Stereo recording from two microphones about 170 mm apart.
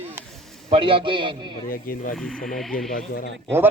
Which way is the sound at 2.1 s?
Centre (ahead or behind).